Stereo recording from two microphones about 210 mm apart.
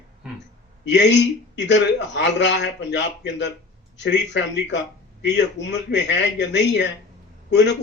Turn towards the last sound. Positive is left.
turn(degrees=55)  # may be behind; listen again after turning